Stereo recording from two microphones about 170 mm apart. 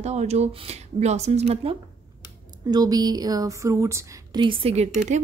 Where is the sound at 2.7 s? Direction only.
25° right (ahead or behind).